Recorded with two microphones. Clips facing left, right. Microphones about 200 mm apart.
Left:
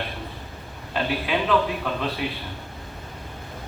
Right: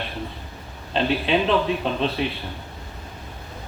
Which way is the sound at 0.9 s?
25° right (ahead or behind).